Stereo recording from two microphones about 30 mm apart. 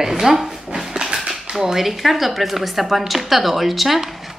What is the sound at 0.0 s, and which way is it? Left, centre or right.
Speech, centre.